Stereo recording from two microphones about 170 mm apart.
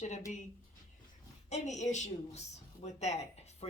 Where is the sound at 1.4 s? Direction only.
40° left (ahead or behind).